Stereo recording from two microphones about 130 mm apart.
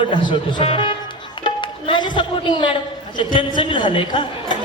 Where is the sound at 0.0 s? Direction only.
35° left (ahead or behind).